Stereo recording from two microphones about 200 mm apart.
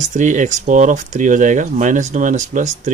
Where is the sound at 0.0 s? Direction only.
40° right (ahead or behind).